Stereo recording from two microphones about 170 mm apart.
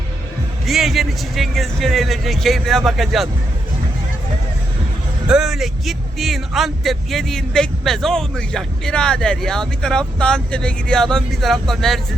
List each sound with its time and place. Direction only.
0.6 s speech: centre (ahead or behind)
5.3 s speech: centre (ahead or behind)